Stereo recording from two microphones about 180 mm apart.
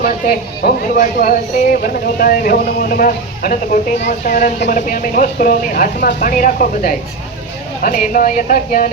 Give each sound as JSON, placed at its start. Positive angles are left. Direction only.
{"t": 0.0, "sound": "speech", "side_deg": 55}